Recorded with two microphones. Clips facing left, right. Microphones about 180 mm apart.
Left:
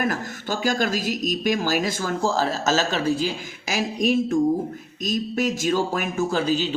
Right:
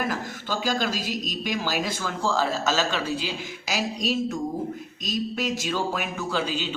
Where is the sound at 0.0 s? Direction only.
45° left (ahead or behind).